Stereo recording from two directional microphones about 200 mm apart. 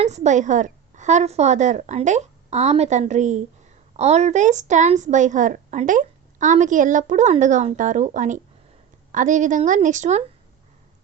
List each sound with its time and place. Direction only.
0.0 s a woman's voice: 35° right (ahead or behind)